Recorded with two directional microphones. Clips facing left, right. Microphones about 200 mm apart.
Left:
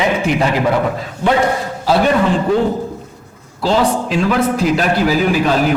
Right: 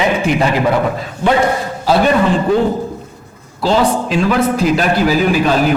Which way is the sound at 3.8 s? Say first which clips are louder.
Right 1 dB; 15° right (ahead or behind).